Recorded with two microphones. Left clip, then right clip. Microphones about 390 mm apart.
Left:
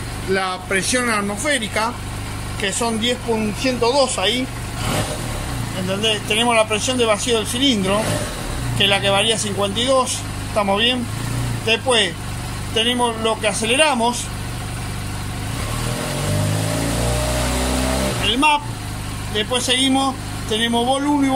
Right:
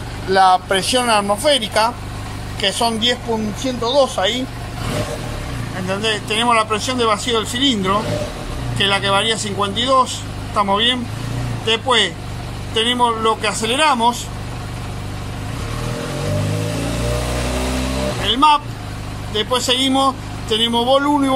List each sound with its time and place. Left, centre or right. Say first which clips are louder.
0.3 s speech: right 8 dB; centre
5.9 s speech: even; centre
18.2 s speech: right 4 dB; centre